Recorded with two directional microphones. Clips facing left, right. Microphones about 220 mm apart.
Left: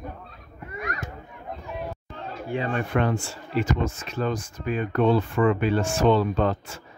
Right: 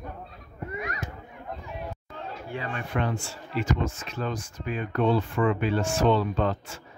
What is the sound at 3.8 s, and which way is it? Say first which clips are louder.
Speech: left 4 dB; 45° left (ahead or behind).